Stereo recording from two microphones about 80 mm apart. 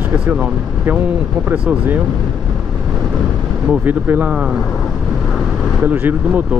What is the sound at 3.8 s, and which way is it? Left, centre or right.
Speech, right.